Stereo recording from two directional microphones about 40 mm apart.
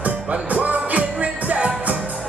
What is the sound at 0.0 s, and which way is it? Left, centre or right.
Music, right.